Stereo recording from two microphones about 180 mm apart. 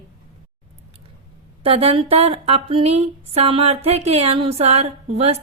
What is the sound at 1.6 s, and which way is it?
Speech, 30° right (ahead or behind).